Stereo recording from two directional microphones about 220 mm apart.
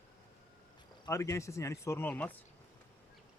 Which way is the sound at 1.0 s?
15° left (ahead or behind).